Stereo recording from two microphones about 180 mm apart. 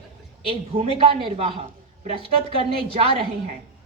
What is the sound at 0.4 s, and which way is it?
A woman's voice, 30° right (ahead or behind).